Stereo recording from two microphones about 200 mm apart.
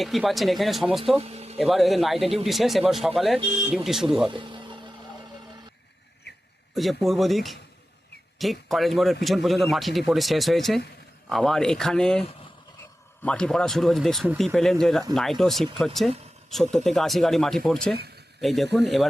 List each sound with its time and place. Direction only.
0.0 s speech: centre (ahead or behind)
1.2 s a sound: 30° right (ahead or behind)
1.5 s speech: centre (ahead or behind)
4.3 s a sound: 25° right (ahead or behind)
6.7 s speech: centre (ahead or behind)
13.2 s speech: 5° left (ahead or behind)